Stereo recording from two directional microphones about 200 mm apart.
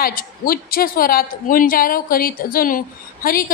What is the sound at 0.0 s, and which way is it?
A woman's voice, 45° left (ahead or behind).